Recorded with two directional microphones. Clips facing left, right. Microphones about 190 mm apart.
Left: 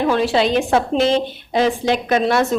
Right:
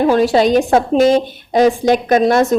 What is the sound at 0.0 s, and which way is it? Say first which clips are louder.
A woman's voice: right 5 dB; 40° right (ahead or behind).